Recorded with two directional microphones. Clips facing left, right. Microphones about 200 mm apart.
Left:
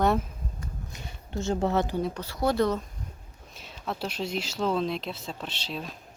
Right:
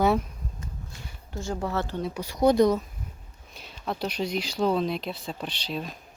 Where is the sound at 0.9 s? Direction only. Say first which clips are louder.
Left 4 dB; 20° left (ahead or behind).